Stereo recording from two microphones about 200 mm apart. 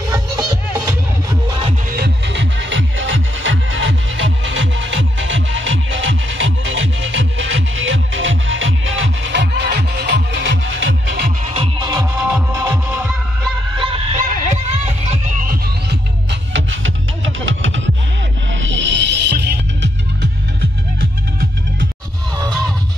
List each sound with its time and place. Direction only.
0.1 s music: 20° right (ahead or behind)
1.9 s music: 55° right (ahead or behind)
11.5 s music: 25° right (ahead or behind)
13.7 s music: 25° right (ahead or behind)
15.4 s music: 50° right (ahead or behind)